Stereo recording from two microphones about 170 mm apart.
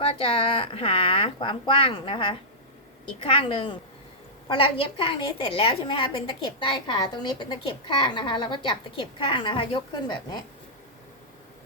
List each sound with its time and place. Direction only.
0.0 s a woman's voice: 30° left (ahead or behind)